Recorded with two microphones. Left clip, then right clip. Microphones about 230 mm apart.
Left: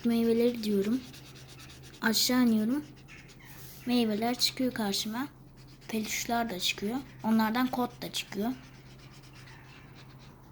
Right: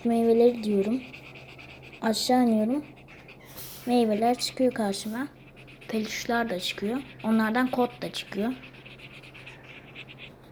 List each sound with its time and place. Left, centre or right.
0.1 s speech: centre
2.0 s speech: centre
3.8 s speech: centre